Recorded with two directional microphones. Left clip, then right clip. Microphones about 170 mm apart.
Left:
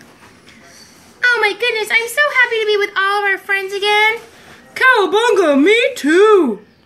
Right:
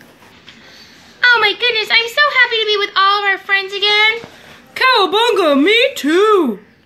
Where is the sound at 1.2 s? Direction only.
15° right (ahead or behind).